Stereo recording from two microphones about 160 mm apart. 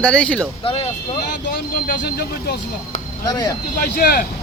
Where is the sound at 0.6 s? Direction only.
35° left (ahead or behind).